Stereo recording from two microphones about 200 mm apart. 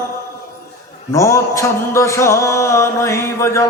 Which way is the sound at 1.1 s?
15° left (ahead or behind).